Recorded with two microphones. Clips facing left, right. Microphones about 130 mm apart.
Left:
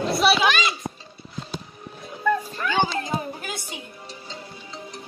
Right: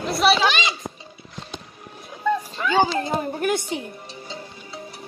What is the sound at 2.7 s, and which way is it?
Speech, 35° right (ahead or behind).